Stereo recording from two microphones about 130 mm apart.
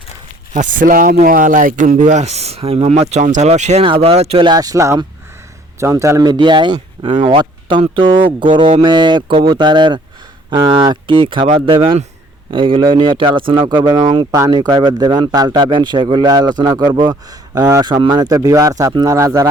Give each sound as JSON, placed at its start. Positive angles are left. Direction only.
{"t": 0.5, "sound": "speech", "side_deg": -80}
{"t": 3.8, "sound": "speech", "side_deg": -45}
{"t": 4.4, "sound": "speech", "side_deg": -30}